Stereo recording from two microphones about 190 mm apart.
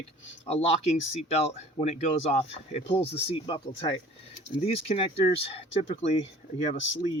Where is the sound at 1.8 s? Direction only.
35° left (ahead or behind).